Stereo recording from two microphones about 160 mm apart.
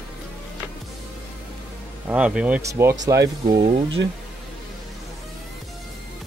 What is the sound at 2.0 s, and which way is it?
Speech, 5° right (ahead or behind).